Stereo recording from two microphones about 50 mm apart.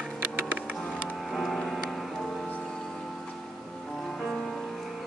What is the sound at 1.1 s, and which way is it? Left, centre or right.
Music, centre.